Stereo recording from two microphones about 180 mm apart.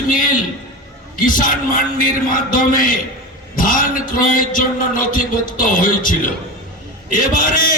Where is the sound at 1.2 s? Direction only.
50° left (ahead or behind).